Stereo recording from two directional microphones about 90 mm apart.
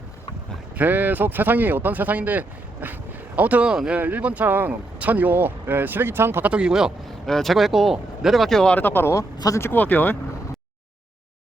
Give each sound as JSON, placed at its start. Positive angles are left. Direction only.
{"t": 0.8, "sound": "speech", "side_deg": -20}
{"t": 6.5, "sound": "speech", "side_deg": -10}
{"t": 7.3, "sound": "speech", "side_deg": 5}
{"t": 8.7, "sound": "speech", "side_deg": 20}
{"t": 9.1, "sound": "speech", "side_deg": 40}
{"t": 9.6, "sound": "speech", "side_deg": 25}